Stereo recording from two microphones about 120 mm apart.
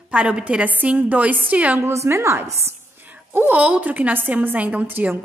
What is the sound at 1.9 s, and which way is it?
A woman's voice, 25° right (ahead or behind).